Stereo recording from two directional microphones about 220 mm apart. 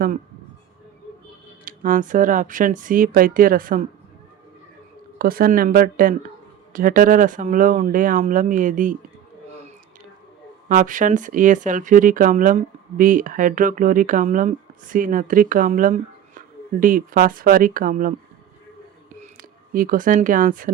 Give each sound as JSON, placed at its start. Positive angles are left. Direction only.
{"t": 1.6, "sound": "speech", "side_deg": -35}
{"t": 5.1, "sound": "speech", "side_deg": -40}
{"t": 10.7, "sound": "speech", "side_deg": -40}
{"t": 19.7, "sound": "speech", "side_deg": -40}